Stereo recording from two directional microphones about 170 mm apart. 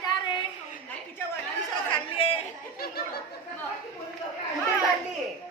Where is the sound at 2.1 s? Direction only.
35° left (ahead or behind).